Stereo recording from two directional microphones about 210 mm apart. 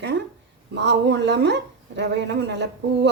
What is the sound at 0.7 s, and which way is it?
Speech, 55° right (ahead or behind).